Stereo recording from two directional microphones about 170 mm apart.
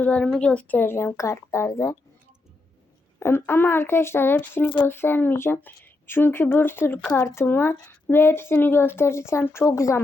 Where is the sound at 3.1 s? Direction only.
15° left (ahead or behind).